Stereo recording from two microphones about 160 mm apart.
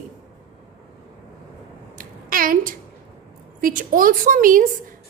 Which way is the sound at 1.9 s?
60° right (ahead or behind).